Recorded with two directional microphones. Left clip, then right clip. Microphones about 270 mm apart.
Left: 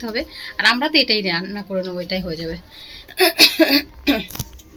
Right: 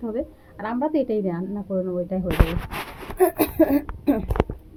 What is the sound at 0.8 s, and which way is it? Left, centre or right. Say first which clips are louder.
Speech: left 6 dB; centre.